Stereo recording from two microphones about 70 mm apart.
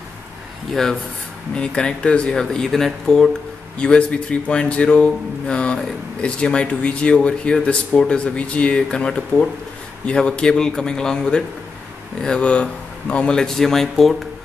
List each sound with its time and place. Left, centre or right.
1.5 s speech: centre